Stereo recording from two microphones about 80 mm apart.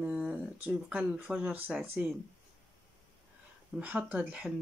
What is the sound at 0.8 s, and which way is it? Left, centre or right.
Speech, centre.